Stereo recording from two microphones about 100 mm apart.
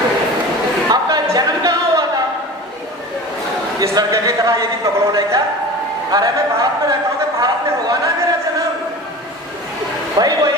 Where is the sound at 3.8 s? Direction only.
30° right (ahead or behind).